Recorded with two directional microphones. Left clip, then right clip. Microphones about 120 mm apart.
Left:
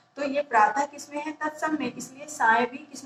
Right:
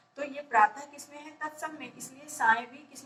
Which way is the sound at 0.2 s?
30° left (ahead or behind).